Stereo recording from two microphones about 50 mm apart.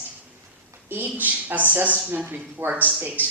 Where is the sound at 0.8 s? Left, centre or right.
Right.